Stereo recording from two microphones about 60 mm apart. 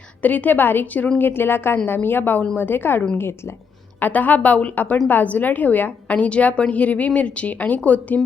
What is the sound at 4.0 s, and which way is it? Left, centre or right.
A woman's voice, left.